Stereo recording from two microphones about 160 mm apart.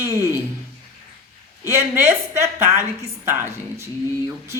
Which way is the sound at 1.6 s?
15° right (ahead or behind).